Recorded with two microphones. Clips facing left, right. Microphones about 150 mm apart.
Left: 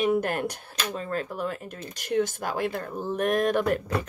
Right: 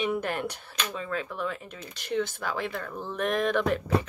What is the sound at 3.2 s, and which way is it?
Speech, 45° left (ahead or behind).